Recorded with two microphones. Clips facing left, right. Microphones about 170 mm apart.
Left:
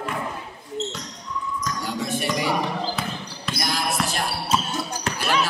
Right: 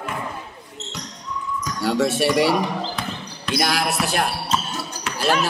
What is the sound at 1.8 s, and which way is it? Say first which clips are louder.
Music: right 10 dB; 75° right (ahead or behind).